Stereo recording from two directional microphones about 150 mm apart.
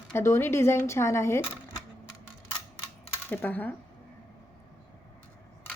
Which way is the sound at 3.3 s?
10° left (ahead or behind).